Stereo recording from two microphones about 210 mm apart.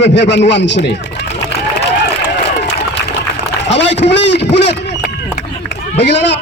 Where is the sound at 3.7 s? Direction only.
55° left (ahead or behind).